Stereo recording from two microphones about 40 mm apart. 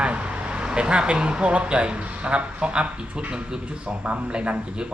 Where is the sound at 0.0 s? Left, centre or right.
Right.